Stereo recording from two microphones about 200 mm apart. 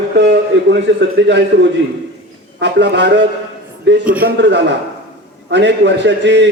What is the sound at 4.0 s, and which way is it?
Speech, 5° right (ahead or behind).